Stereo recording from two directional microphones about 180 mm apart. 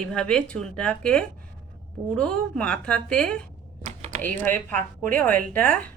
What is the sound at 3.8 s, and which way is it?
Typing, 45° right (ahead or behind).